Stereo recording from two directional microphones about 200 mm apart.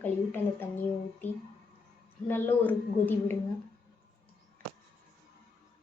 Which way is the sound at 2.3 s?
10° left (ahead or behind).